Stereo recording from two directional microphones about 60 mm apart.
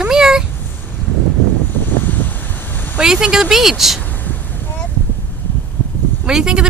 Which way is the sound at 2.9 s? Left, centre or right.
Centre.